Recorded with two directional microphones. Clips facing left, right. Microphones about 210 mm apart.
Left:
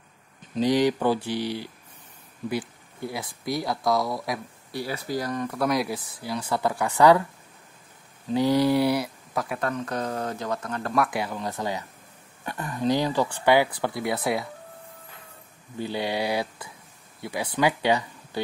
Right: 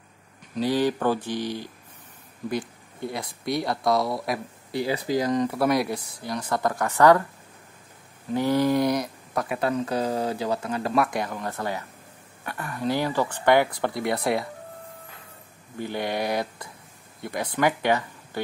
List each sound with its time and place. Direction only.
0.6 s speech: 15° left (ahead or behind)
3.1 s speech: centre (ahead or behind)
4.7 s speech: 20° right (ahead or behind)
5.5 s speech: 5° right (ahead or behind)
8.3 s speech: 15° left (ahead or behind); by 10.9 s 10° right (ahead or behind)
11.0 s speech: 5° left (ahead or behind)
15.9 s speech: 10° left (ahead or behind)